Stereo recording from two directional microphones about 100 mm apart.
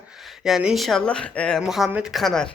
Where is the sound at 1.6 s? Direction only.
5° right (ahead or behind).